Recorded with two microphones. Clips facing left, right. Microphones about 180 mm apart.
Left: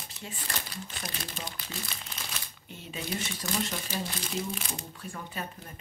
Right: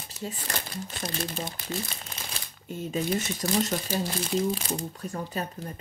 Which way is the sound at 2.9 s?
40° right (ahead or behind).